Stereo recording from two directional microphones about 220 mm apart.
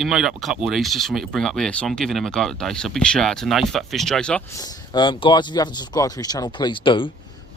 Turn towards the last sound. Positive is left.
turn(degrees=25)  # may be behind; listen again after turning